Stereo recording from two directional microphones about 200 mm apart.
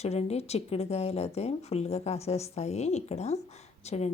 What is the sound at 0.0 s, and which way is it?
A woman's voice, 30° left (ahead or behind).